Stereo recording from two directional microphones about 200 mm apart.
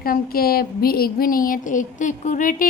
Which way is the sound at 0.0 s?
45° left (ahead or behind).